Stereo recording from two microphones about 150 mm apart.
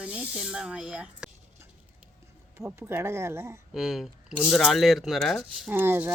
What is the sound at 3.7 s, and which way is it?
Speech, 5° right (ahead or behind).